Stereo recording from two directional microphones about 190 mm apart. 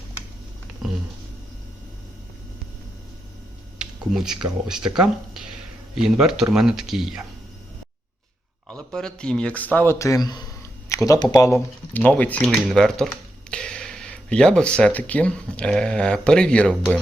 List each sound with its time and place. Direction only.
3.8 s speech: centre (ahead or behind)
5.9 s speech: 5° right (ahead or behind)
8.9 s speech: 5° left (ahead or behind)